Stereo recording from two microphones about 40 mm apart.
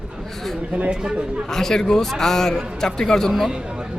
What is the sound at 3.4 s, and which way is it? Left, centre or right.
Speech, centre.